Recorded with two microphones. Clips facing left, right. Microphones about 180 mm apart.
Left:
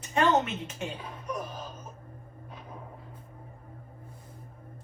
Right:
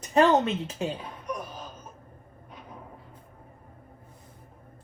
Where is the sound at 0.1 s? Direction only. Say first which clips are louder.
Right 5 dB; 35° right (ahead or behind).